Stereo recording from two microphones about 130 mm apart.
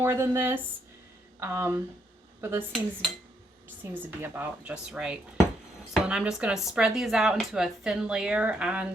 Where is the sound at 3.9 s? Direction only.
15° right (ahead or behind).